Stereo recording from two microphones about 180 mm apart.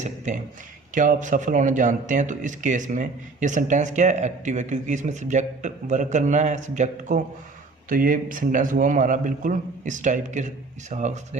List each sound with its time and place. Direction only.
0.3 s a man's voice: 40° right (ahead or behind)